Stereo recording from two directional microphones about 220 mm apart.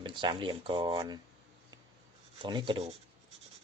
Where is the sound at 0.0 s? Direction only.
20° right (ahead or behind).